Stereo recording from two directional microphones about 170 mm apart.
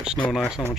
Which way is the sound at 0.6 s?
Centre (ahead or behind).